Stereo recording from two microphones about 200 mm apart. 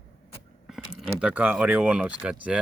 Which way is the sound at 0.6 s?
Centre (ahead or behind).